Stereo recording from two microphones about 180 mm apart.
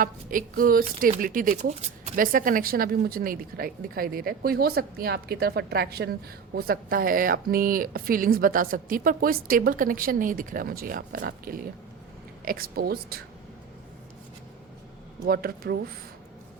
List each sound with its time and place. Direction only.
0.0 s a woman's voice: 50° right (ahead or behind)
15.3 s speech: 55° right (ahead or behind)